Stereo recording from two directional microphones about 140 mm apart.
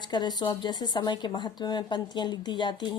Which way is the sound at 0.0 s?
30° left (ahead or behind).